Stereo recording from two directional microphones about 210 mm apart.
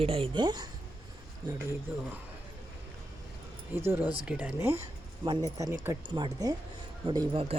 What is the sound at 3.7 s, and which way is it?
Speech, 10° right (ahead or behind).